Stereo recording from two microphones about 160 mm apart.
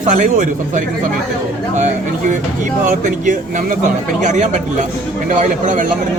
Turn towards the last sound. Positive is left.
turn(degrees=-50)  # may be behind; listen again after turning